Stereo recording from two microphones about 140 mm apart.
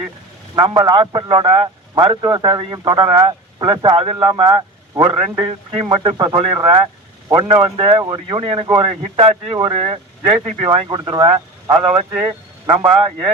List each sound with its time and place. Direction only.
0.5 s a man's voice: 35° right (ahead or behind)
5.4 s speech: 45° right (ahead or behind)